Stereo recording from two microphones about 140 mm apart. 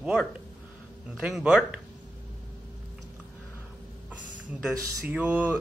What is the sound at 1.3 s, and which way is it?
Speech, 5° right (ahead or behind).